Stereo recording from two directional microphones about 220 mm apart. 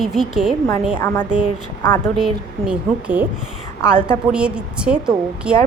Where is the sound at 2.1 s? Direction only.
5° right (ahead or behind).